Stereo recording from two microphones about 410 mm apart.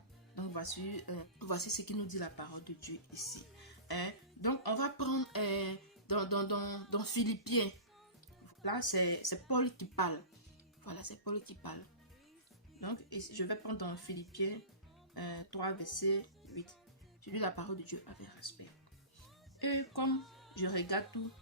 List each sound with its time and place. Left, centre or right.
0.3 s speech: left
3.8 s music: left
8.6 s speech: left
12.8 s speech: left
19.6 s speech: left
20.2 s a sound: centre
20.6 s speech: left